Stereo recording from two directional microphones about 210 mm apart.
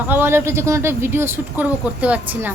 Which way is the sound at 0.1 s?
10° right (ahead or behind).